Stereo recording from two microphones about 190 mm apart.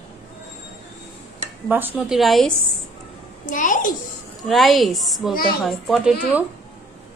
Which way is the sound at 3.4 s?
45° left (ahead or behind).